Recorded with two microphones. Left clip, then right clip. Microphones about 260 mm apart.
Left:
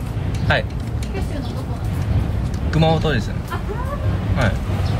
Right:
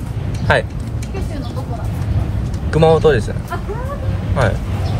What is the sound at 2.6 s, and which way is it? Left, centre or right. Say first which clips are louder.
Speech: right 8 dB; centre.